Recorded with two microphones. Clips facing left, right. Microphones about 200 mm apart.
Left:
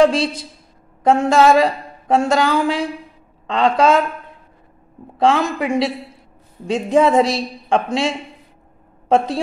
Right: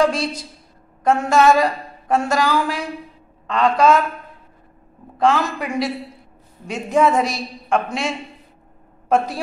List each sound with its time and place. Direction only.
0.0 s a woman's voice: 30° left (ahead or behind)
5.2 s a woman's voice: 25° left (ahead or behind)
7.0 s a woman's voice: 30° left (ahead or behind)
9.1 s a woman's voice: 25° left (ahead or behind)